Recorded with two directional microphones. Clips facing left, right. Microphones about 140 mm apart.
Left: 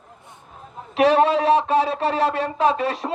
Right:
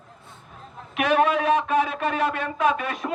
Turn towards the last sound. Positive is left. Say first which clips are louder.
# left 3 dB
turn(degrees=30)  # may be behind; listen again after turning